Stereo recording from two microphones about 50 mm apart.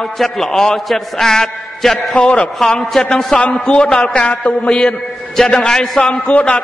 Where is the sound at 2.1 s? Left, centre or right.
Centre.